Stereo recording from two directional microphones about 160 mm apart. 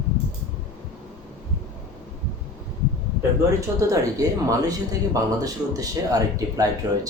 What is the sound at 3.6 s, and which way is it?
Speech, 20° right (ahead or behind).